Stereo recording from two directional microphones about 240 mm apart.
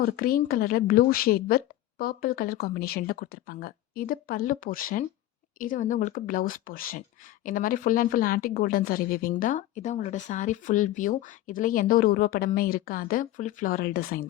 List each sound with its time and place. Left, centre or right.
0.0 s a woman's voice: left